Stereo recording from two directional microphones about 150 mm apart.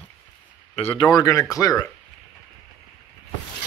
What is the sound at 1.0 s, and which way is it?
Speech, 25° left (ahead or behind).